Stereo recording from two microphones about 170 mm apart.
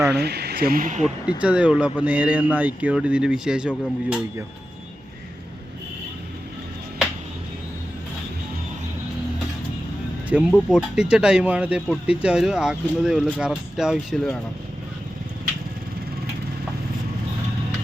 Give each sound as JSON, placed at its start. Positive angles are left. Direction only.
{"t": 0.1, "sound": "speech", "side_deg": -75}
{"t": 1.4, "sound": "speech", "side_deg": -5}
{"t": 10.3, "sound": "speech", "side_deg": -5}